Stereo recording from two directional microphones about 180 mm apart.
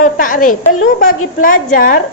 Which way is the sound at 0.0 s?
50° left (ahead or behind).